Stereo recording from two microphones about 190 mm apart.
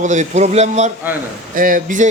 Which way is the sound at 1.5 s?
45° right (ahead or behind).